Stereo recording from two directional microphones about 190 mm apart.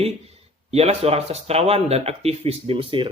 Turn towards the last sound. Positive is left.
turn(degrees=-25)  # may be behind; listen again after turning